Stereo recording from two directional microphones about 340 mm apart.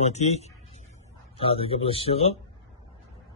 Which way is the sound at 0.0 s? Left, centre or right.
Centre.